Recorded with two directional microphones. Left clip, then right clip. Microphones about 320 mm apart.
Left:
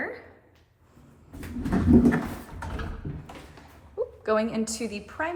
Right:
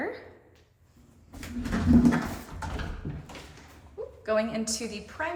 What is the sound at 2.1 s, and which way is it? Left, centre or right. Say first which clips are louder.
Pigeon: left 1 dB; centre.